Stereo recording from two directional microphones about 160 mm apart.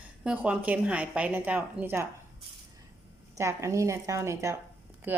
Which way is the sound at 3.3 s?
20° right (ahead or behind).